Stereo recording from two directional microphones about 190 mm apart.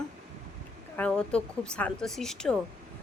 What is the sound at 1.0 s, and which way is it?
A woman's voice, 5° left (ahead or behind).